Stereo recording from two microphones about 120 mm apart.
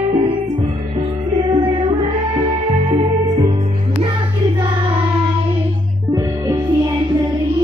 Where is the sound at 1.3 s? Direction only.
35° right (ahead or behind).